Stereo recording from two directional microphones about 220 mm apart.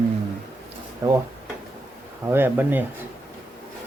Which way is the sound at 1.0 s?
15° right (ahead or behind).